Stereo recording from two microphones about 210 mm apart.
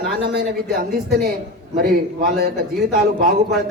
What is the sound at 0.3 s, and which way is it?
Speech, 50° right (ahead or behind).